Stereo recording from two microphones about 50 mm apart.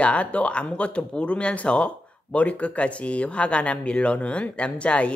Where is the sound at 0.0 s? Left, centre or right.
Left.